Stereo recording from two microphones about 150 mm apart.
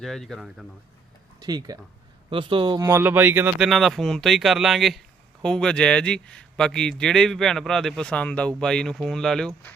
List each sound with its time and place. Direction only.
0.0 s speech: 5° left (ahead or behind)
1.4 s speech: 25° right (ahead or behind)
2.7 s speech: 15° right (ahead or behind)
3.6 s speech: centre (ahead or behind)